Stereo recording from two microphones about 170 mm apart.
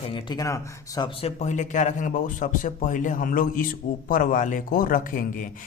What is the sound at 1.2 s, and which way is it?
Speech, 45° left (ahead or behind).